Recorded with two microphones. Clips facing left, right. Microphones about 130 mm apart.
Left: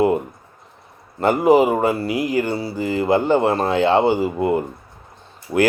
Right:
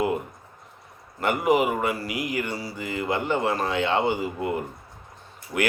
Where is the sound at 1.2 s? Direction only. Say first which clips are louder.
Left 7 dB; 30° left (ahead or behind).